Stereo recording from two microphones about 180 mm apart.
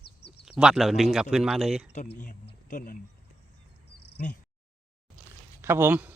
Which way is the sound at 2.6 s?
50° left (ahead or behind).